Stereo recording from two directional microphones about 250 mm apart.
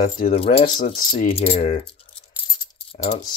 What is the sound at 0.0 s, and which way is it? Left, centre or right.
Speech, left.